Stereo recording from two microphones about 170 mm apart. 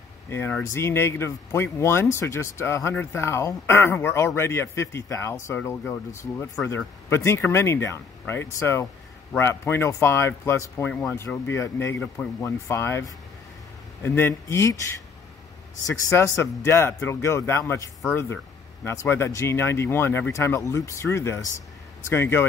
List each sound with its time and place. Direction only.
0.3 s speech: 10° left (ahead or behind)
15.9 s speech: 15° left (ahead or behind)
18.9 s speech: 15° left (ahead or behind)